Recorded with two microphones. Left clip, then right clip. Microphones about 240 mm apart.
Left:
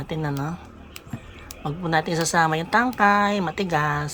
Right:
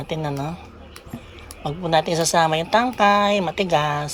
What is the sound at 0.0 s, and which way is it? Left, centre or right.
Speech, left.